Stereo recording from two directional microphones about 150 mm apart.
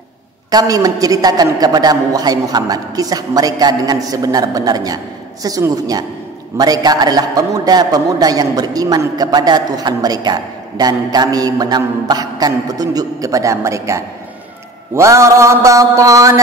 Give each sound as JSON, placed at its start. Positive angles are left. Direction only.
{"t": 0.5, "sound": "a man's voice", "side_deg": -25}